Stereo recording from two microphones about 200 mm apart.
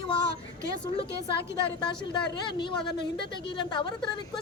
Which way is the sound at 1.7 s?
20° left (ahead or behind).